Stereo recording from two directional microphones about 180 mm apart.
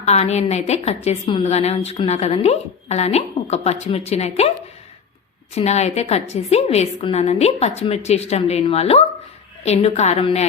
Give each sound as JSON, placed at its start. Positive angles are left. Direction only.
{"t": 0.0, "sound": "a woman's voice", "side_deg": 35}
{"t": 5.5, "sound": "a woman's voice", "side_deg": 35}